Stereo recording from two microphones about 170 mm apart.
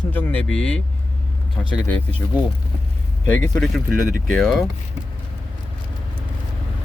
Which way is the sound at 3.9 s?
55° right (ahead or behind).